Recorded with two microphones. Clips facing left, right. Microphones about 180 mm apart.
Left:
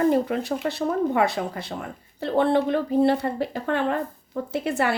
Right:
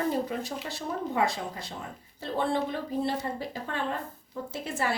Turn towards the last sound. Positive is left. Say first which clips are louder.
# left 7 dB
turn(degrees=65)  # may be behind; listen again after turning